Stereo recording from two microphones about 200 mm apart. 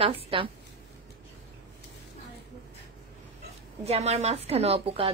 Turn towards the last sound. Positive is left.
turn(degrees=-30)  # may be behind; listen again after turning